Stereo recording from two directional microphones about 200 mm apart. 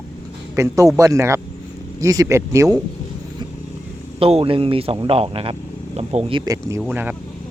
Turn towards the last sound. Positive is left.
turn(degrees=-5)  # may be behind; listen again after turning